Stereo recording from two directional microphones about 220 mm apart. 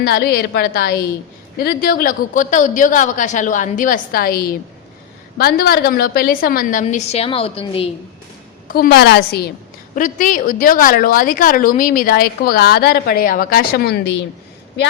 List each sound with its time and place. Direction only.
0.0 s a woman's voice: 45° left (ahead or behind); by 7.9 s 25° left (ahead or behind)
8.6 s a woman's voice: 40° left (ahead or behind)
9.9 s a woman's voice: 35° left (ahead or behind)